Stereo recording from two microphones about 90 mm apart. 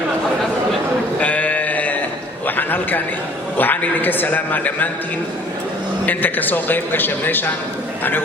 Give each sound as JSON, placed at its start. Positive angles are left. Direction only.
{"t": 1.2, "sound": "sheep", "side_deg": 15}
{"t": 2.6, "sound": "a man's voice", "side_deg": 20}
{"t": 6.1, "sound": "a man's voice", "side_deg": 20}